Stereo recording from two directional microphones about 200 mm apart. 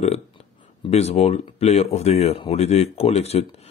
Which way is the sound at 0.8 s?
30° left (ahead or behind).